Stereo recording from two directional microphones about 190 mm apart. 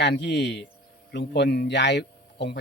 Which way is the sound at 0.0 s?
65° left (ahead or behind).